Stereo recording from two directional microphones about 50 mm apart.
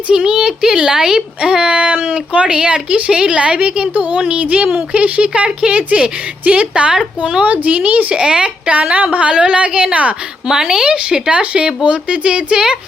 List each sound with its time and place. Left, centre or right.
0.1 s a woman's voice: centre; by 8.0 s right
8.1 s speech: centre
10.4 s speech: centre